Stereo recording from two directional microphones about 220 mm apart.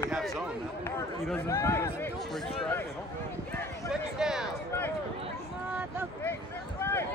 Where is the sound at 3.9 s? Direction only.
5° right (ahead or behind).